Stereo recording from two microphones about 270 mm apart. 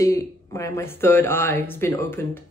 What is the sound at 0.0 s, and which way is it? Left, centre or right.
Speech, centre.